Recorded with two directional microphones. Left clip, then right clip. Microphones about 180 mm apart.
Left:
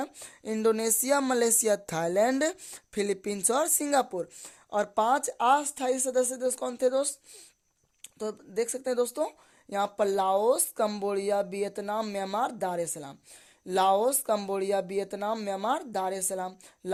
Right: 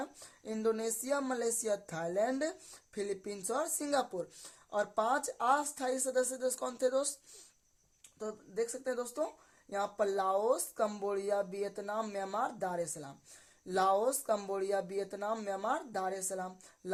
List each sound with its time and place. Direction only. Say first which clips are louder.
0.4 s speech: left 8 dB; 45° left (ahead or behind)
8.2 s speech: left 6 dB; 45° left (ahead or behind)